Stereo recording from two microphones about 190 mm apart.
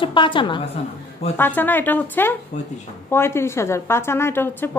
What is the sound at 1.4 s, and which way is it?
A woman's voice, 10° left (ahead or behind).